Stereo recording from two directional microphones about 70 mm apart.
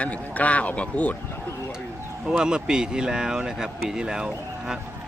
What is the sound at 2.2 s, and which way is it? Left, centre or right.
Speech, centre.